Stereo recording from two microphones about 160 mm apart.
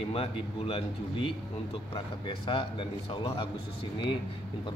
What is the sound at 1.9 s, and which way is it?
A man's voice, 30° left (ahead or behind).